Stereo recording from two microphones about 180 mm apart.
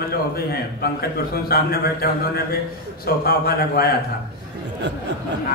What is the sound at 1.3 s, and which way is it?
A man's voice, 55° left (ahead or behind).